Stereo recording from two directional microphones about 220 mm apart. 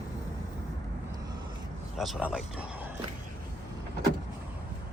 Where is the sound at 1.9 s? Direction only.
Centre (ahead or behind).